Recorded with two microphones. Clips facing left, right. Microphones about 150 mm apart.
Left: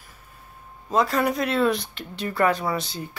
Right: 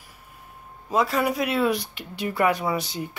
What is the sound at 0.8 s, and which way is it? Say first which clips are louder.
Speech: left 1 dB; 5° right (ahead or behind).